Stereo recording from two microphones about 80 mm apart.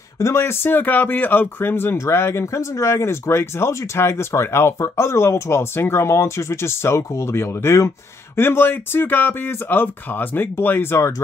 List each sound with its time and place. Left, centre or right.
0.2 s speech: left